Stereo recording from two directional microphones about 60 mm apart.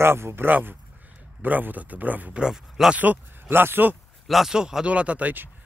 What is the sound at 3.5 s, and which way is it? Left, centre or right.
Speech, right.